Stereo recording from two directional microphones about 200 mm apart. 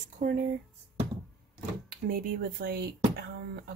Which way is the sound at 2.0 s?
50° right (ahead or behind).